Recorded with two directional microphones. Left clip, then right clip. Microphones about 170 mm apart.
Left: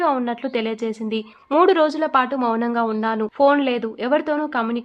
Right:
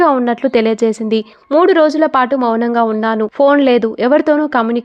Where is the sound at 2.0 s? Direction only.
40° right (ahead or behind).